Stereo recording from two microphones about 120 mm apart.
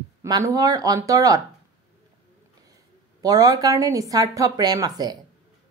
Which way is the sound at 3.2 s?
30° right (ahead or behind).